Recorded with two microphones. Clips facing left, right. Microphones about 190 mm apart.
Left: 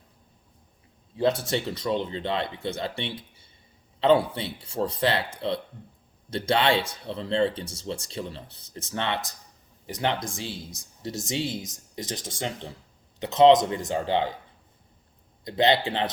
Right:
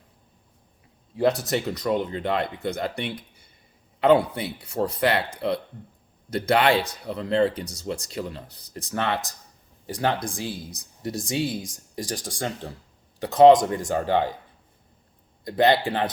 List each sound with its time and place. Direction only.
1.1 s speech: 25° left (ahead or behind)
2.1 s speech: 50° right (ahead or behind)
2.6 s speech: 25° left (ahead or behind)
15.4 s speech: 20° left (ahead or behind)